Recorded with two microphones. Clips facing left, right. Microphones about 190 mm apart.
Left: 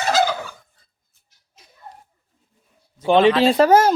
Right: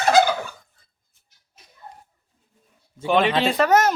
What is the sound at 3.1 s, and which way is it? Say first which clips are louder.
Speech: left 5 dB; 30° left (ahead or behind).